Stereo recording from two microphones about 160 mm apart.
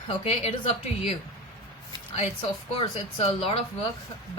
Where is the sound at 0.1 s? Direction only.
45° left (ahead or behind).